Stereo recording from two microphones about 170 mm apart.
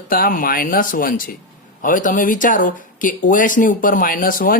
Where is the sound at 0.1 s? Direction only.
55° left (ahead or behind).